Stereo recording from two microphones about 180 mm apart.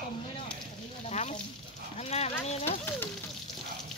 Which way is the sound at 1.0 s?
40° left (ahead or behind).